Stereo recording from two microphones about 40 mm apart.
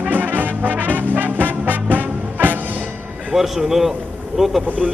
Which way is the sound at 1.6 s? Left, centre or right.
Right.